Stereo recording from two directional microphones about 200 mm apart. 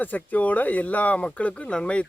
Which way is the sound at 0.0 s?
10° left (ahead or behind).